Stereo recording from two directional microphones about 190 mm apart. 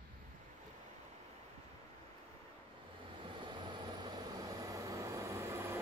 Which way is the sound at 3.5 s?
25° right (ahead or behind).